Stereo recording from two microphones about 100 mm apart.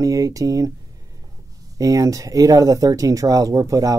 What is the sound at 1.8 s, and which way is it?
Speech, 35° right (ahead or behind).